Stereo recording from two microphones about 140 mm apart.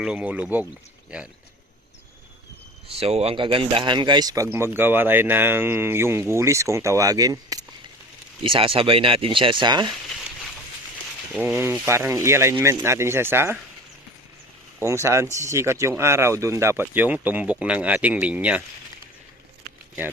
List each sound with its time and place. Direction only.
0.0 s speech: 10° right (ahead or behind)
2.9 s speech: 45° right (ahead or behind); by 4.4 s 30° right (ahead or behind)
4.4 s speech: 15° right (ahead or behind)
8.4 s speech: 40° right (ahead or behind)
11.3 s speech: 10° right (ahead or behind)
15.0 s speech: 20° right (ahead or behind)